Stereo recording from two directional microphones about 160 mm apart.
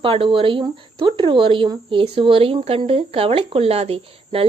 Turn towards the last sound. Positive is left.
turn(degrees=-35)  # may be behind; listen again after turning